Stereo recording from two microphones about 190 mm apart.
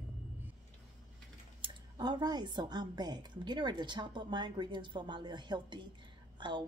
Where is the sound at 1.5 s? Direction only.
25° right (ahead or behind).